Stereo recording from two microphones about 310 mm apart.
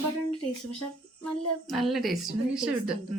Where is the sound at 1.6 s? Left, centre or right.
Centre.